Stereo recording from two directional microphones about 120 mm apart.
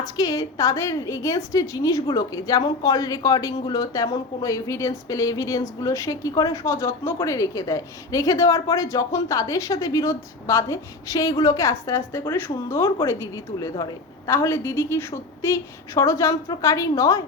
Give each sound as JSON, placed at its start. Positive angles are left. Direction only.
{"t": 0.0, "sound": "a woman's voice", "side_deg": 30}